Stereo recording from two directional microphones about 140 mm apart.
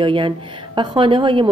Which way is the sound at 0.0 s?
35° right (ahead or behind).